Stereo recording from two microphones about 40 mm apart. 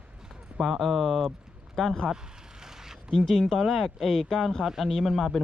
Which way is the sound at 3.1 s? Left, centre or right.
Centre.